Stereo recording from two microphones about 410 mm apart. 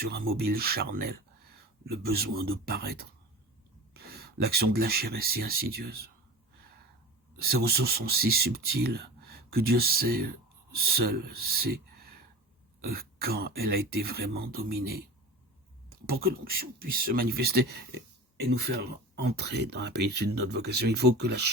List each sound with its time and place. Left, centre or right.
0.3 s speech: right
7.3 s speech: right
12.8 s speech: right
15.9 s speech: right